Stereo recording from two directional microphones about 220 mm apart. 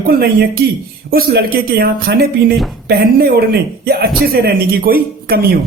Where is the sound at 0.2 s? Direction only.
45° right (ahead or behind).